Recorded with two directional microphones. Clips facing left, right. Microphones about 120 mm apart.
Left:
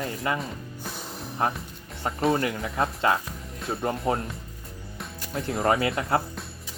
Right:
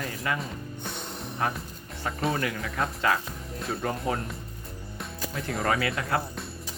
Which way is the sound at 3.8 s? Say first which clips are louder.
Left 4 dB; 30° left (ahead or behind).